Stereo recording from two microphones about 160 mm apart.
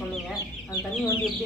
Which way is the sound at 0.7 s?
20° left (ahead or behind).